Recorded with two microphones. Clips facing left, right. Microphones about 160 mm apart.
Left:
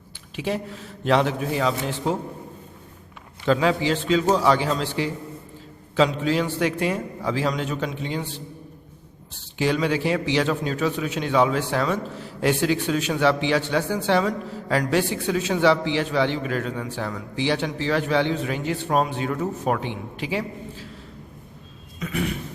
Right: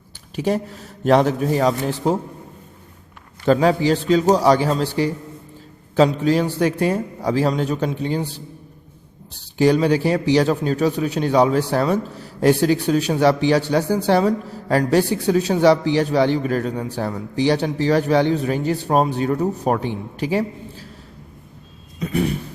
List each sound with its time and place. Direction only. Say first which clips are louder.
0.3 s a man's voice: right 6 dB; 40° right (ahead or behind)
3.4 s a man's voice: right 5 dB; 40° right (ahead or behind)
21.9 s a sound: right 6 dB; 35° right (ahead or behind)